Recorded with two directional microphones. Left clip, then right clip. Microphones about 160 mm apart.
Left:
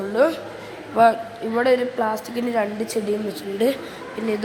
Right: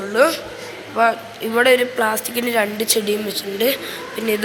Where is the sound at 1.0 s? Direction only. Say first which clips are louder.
Left 1 dB; 30° left (ahead or behind).